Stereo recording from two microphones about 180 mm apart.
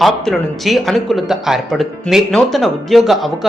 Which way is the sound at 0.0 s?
Centre (ahead or behind).